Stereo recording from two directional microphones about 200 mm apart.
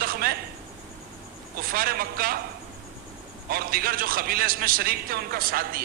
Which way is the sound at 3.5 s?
50° right (ahead or behind).